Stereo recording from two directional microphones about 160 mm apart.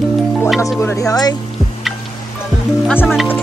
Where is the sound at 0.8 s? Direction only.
20° left (ahead or behind).